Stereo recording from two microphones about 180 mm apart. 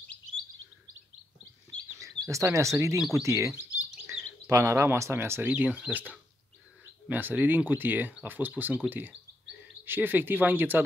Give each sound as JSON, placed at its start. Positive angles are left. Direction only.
{"t": 2.0, "sound": "speech", "side_deg": -15}